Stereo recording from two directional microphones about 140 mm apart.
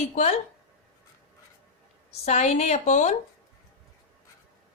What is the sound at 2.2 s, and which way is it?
Speech, 55° left (ahead or behind).